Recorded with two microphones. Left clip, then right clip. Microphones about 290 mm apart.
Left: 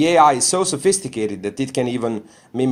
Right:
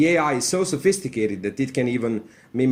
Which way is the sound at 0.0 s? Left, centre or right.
Centre.